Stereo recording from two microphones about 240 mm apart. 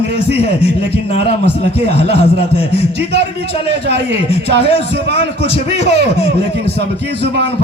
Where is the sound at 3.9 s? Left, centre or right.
Left.